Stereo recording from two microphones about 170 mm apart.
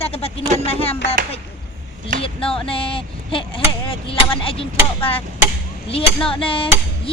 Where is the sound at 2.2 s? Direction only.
30° left (ahead or behind).